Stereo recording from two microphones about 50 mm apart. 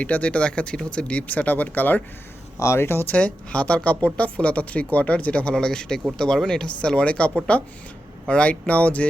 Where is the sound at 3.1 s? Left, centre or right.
Left.